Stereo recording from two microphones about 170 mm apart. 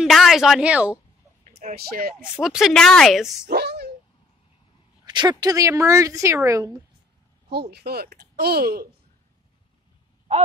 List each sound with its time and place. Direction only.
0.0 s speech: centre (ahead or behind)
1.6 s speech: 55° right (ahead or behind)
2.4 s a woman's voice: centre (ahead or behind)
3.4 s a sound: 75° right (ahead or behind)
5.0 s a woman's voice: 25° right (ahead or behind)
7.4 s speech: 70° right (ahead or behind)